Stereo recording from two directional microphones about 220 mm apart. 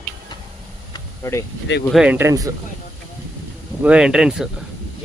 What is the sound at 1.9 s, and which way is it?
Speech, 5° right (ahead or behind).